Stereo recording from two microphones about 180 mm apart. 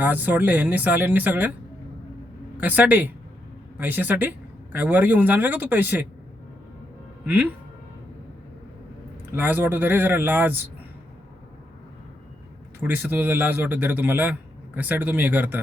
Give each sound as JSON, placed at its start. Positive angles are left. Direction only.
{"t": 0.0, "sound": "speech", "side_deg": -10}
{"t": 2.6, "sound": "speech", "side_deg": -10}
{"t": 7.3, "sound": "speech", "side_deg": -10}
{"t": 9.3, "sound": "speech", "side_deg": -10}
{"t": 12.8, "sound": "speech", "side_deg": -10}